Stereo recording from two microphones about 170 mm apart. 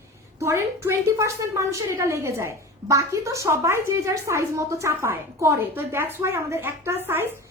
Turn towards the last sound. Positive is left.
turn(degrees=-15)  # may be behind; listen again after turning